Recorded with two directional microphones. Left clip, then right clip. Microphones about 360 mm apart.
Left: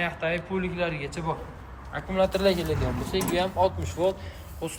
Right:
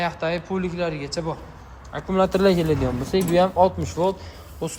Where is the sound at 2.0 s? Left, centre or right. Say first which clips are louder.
Right 4 dB; right.